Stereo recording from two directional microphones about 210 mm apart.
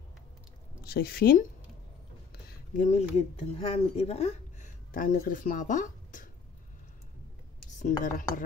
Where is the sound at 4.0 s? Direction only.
30° left (ahead or behind).